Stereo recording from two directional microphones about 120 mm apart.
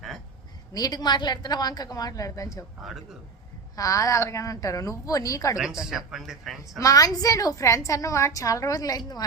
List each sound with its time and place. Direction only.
0.7 s a woman's voice: 35° left (ahead or behind)
3.8 s a woman's voice: 30° left (ahead or behind)
6.1 s speech: 5° right (ahead or behind)
6.7 s a woman's voice: 30° left (ahead or behind)